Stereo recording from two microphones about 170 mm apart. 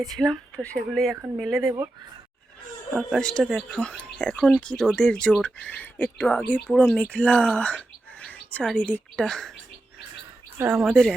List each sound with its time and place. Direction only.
0.0 s speech: centre (ahead or behind)
1.5 s speech: 20° right (ahead or behind)
2.9 s speech: centre (ahead or behind)
10.6 s speech: 10° right (ahead or behind)